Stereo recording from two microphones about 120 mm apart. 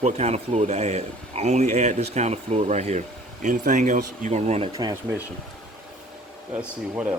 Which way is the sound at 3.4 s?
90° right.